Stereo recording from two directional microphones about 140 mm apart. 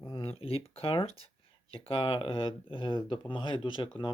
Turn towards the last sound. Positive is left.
turn(degrees=35)  # may be behind; listen again after turning